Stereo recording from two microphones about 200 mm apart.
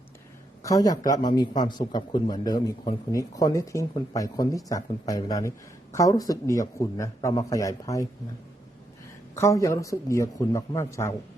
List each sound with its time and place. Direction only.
0.6 s a man's voice: 15° left (ahead or behind)
9.3 s a man's voice: 15° left (ahead or behind)